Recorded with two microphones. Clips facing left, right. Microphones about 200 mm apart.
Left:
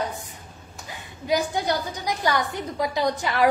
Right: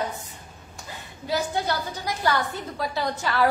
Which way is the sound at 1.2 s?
15° left (ahead or behind).